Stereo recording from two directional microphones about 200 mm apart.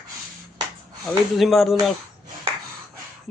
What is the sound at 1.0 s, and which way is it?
Speech, centre (ahead or behind).